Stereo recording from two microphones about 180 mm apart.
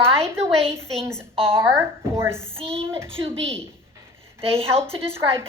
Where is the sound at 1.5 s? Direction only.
15° right (ahead or behind).